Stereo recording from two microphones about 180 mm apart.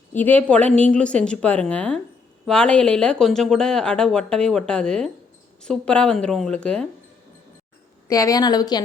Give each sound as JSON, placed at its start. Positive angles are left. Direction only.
{"t": 0.1, "sound": "a woman's voice", "side_deg": 10}
{"t": 8.0, "sound": "a woman's voice", "side_deg": 20}